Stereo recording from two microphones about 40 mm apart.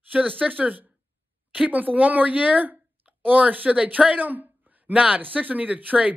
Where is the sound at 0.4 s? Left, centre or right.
Right.